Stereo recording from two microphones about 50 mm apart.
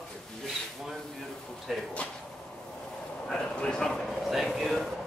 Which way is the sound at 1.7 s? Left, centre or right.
Centre.